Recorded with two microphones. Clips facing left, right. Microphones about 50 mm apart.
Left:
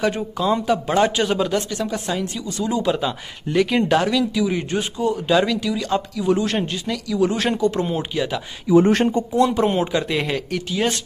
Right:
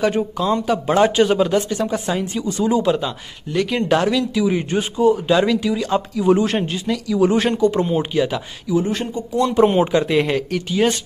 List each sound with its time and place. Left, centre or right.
0.0 s speech: centre
2.9 s speech: centre
7.4 s speech: centre
8.7 s speech: left
9.6 s speech: centre